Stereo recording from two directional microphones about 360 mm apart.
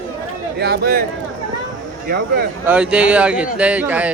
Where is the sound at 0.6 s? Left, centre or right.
Right.